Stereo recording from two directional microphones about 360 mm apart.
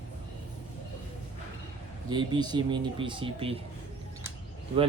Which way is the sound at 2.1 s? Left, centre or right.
Centre.